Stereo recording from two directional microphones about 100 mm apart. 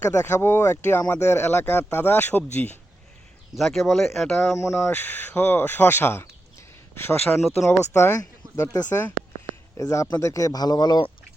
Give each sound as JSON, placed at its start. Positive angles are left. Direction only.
{"t": 0.1, "sound": "speech", "side_deg": 30}
{"t": 3.5, "sound": "speech", "side_deg": 0}
{"t": 4.5, "sound": "speech", "side_deg": 30}
{"t": 4.9, "sound": "speech", "side_deg": 20}
{"t": 7.4, "sound": "speech", "side_deg": 0}
{"t": 7.9, "sound": "speech", "side_deg": 25}